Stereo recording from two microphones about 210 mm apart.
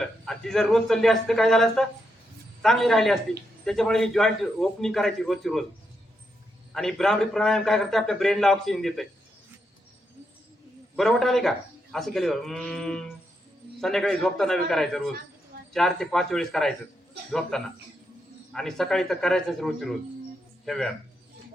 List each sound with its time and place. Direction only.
0.0 s a man's voice: centre (ahead or behind)
6.7 s a man's voice: centre (ahead or behind)
10.9 s a man's voice: centre (ahead or behind)